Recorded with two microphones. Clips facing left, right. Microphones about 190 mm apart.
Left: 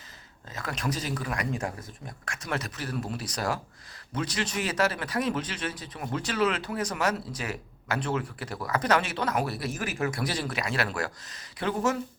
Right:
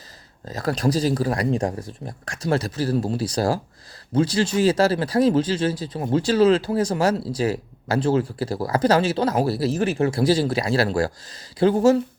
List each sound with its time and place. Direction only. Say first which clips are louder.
0.4 s speech: right 10 dB; 35° right (ahead or behind)